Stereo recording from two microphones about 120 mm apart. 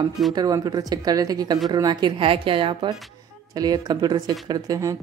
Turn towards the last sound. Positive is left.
turn(degrees=-30)  # may be behind; listen again after turning